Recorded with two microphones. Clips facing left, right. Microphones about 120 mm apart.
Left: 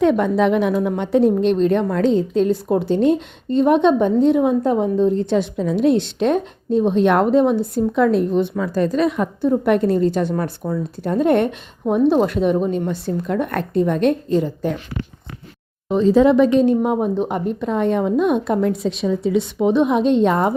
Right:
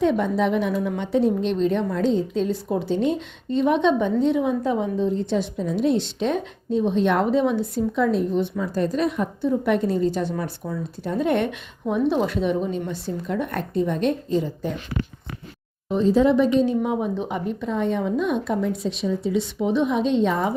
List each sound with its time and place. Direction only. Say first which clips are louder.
0.0 s a woman's voice: left 5 dB; 70° left (ahead or behind)
0.9 s a woman's voice: left 5 dB; 55° left (ahead or behind)
7.9 s a woman's voice: left 5 dB; 70° left (ahead or behind); by 9.3 s 90° left
9.4 s a woman's voice: left 5 dB; 55° left (ahead or behind)
15.9 s speech: left 4 dB; 90° left
16.6 s a woman's voice: left 5 dB; 55° left (ahead or behind)